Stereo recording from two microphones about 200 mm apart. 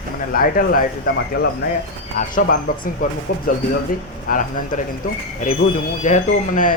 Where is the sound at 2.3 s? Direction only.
40° left (ahead or behind).